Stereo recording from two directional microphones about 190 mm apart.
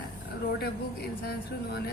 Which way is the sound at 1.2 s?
55° left (ahead or behind).